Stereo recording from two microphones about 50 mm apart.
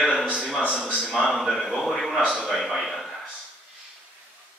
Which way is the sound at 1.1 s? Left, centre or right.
Centre.